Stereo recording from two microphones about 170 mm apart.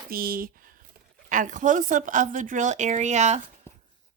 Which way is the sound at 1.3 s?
50° right (ahead or behind).